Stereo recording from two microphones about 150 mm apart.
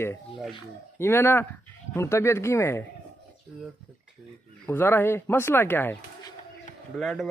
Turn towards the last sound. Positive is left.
turn(degrees=0)  # may be behind; listen again after turning